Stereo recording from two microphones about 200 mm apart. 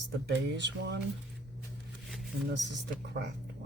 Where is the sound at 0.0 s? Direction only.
60° right (ahead or behind).